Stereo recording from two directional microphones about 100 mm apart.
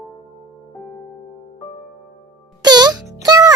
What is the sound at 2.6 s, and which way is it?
Music, 40° right (ahead or behind).